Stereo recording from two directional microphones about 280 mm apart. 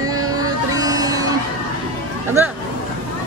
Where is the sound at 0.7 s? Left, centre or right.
Centre.